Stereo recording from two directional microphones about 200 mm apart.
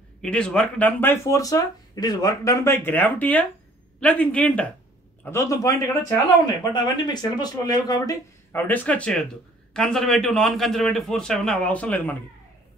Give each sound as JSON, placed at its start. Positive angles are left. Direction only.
{"t": 0.2, "sound": "a man's voice", "side_deg": 5}